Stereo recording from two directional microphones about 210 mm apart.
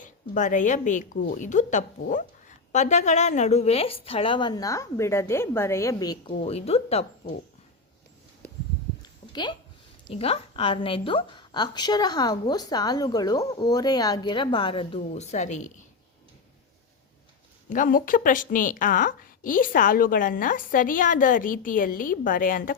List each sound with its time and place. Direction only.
0.0 s a woman's voice: 35° left (ahead or behind)
9.0 s a sound: 20° left (ahead or behind)
10.1 s a woman's voice: 30° left (ahead or behind)
17.7 s a woman's voice: 40° left (ahead or behind)